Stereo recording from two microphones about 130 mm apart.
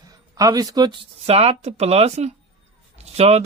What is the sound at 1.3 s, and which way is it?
Speech, 50° right (ahead or behind).